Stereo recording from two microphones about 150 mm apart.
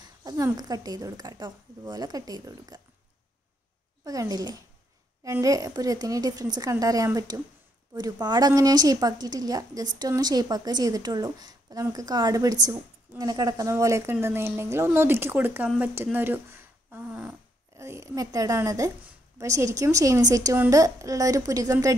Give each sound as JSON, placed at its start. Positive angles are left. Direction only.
{"t": 0.0, "sound": "a woman's voice", "side_deg": -25}
{"t": 4.0, "sound": "a woman's voice", "side_deg": -25}
{"t": 17.7, "sound": "a woman's voice", "side_deg": -20}